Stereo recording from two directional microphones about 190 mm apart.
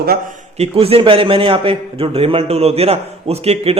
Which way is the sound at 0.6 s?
30° right (ahead or behind).